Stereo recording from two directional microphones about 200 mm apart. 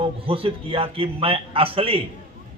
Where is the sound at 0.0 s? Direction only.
25° right (ahead or behind).